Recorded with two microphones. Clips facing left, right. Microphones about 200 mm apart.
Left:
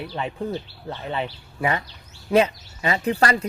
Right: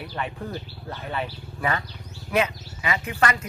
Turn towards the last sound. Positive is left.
turn(degrees=35)  # may be behind; listen again after turning